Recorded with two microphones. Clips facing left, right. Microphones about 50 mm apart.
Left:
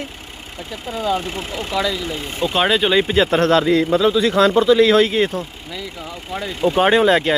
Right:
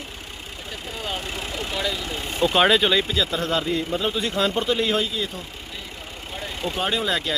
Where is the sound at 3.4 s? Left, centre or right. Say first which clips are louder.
Left 9 dB; left.